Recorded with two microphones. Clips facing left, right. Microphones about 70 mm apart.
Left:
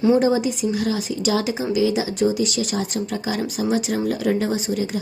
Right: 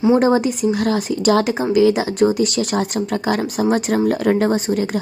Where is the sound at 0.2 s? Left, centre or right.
Right.